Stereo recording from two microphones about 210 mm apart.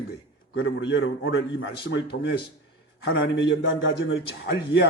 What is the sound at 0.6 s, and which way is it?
A man's voice, 55° left (ahead or behind).